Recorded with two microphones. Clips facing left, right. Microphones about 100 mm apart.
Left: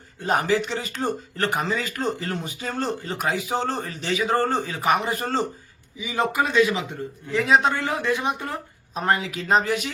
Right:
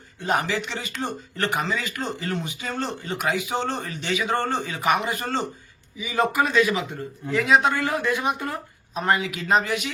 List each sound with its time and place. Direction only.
0.2 s speech: 40° left (ahead or behind)
6.0 s speech: 20° left (ahead or behind)
9.0 s speech: 35° left (ahead or behind)